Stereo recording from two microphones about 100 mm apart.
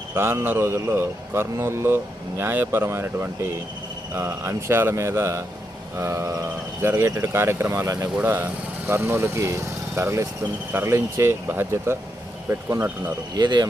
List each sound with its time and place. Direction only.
0.1 s speech: 25° right (ahead or behind)
8.2 s speech: 20° right (ahead or behind)
13.3 s speech: 45° right (ahead or behind)